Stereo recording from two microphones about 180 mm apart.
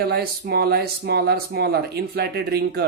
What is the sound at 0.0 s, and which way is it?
Speech, 65° right (ahead or behind).